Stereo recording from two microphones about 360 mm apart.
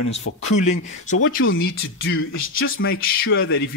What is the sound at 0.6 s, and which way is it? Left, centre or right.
Speech, centre.